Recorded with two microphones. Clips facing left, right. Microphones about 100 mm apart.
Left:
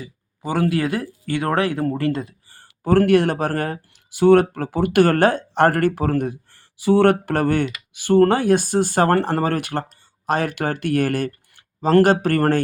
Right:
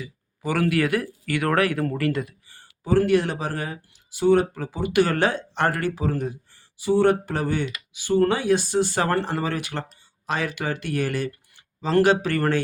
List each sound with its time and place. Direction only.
0.0 s speech: 30° left (ahead or behind)
2.6 s speech: 55° left (ahead or behind)